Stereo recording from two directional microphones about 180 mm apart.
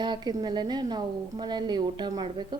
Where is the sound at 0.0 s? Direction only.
25° right (ahead or behind).